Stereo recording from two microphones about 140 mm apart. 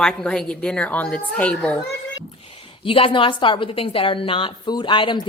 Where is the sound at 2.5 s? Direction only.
40° left (ahead or behind).